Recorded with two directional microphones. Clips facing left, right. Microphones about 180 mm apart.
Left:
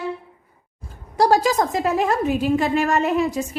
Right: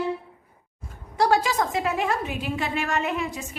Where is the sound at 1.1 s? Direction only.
40° left (ahead or behind).